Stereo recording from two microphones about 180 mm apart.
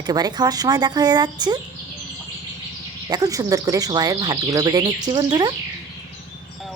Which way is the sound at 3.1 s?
20° right (ahead or behind).